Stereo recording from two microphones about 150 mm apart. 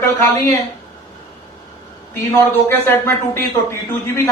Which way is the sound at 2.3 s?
15° left (ahead or behind).